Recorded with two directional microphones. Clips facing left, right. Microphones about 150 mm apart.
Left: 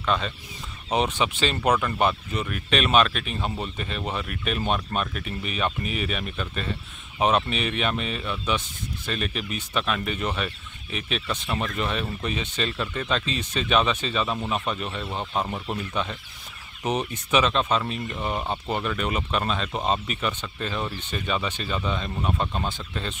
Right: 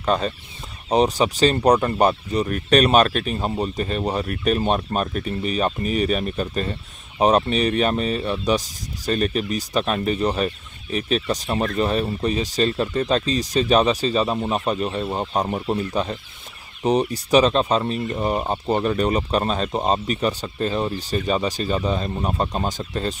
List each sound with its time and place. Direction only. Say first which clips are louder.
0.0 s speech: right 5 dB; 40° right (ahead or behind)